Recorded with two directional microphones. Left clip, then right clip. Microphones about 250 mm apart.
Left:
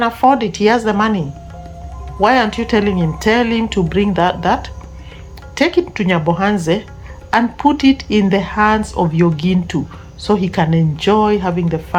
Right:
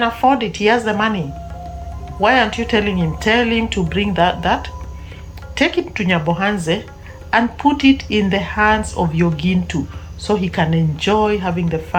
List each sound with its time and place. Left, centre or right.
0.0 s speech: left
2.2 s speech: left